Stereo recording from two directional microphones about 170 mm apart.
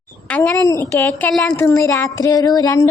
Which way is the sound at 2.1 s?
20° left (ahead or behind).